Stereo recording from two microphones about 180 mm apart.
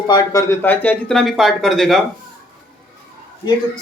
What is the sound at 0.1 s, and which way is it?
Speech, 20° left (ahead or behind).